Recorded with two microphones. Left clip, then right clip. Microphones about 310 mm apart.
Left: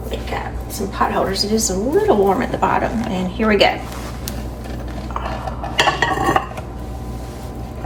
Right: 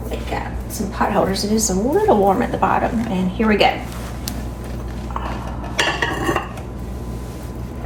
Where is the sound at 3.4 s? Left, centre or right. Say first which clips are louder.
Left 2 dB; centre.